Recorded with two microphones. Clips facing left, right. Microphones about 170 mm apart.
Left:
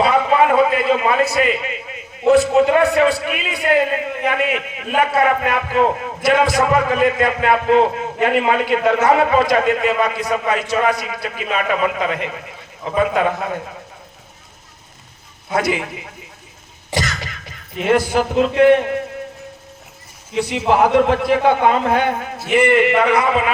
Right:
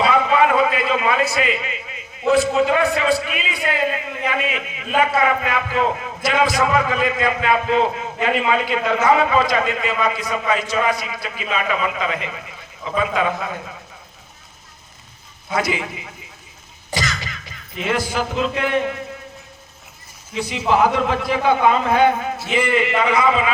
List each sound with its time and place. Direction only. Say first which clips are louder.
0.0 s a man's voice: left 2 dB; 50° left (ahead or behind)
15.5 s a man's voice: left 3 dB; 55° left (ahead or behind)
20.3 s a man's voice: left 2 dB; 60° left (ahead or behind)